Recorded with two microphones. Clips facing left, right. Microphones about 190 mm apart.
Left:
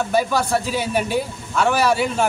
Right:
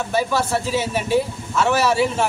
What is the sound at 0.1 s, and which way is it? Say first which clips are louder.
Speech: even; centre (ahead or behind).